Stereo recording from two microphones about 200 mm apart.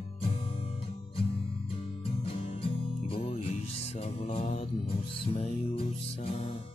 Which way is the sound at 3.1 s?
30° left (ahead or behind).